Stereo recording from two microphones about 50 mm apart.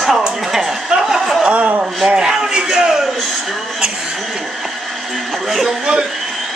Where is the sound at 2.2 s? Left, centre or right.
Centre.